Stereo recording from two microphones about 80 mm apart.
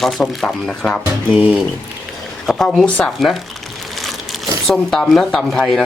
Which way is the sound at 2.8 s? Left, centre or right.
Centre.